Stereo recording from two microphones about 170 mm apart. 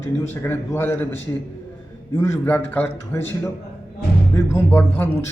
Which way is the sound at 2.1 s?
15° left (ahead or behind).